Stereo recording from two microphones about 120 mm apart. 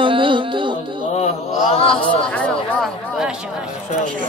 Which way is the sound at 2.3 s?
10° left (ahead or behind).